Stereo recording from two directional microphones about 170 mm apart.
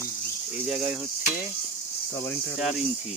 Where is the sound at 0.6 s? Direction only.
Centre (ahead or behind).